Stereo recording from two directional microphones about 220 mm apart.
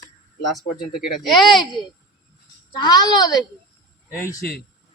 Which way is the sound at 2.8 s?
20° left (ahead or behind).